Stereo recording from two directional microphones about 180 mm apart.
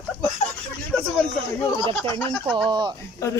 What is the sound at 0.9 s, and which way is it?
Speech, centre (ahead or behind).